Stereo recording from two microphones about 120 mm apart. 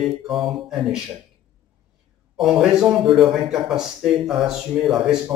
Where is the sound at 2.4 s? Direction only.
5° right (ahead or behind).